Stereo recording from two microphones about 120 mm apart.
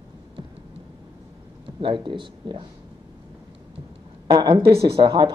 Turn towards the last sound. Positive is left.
turn(degrees=-40)  # may be behind; listen again after turning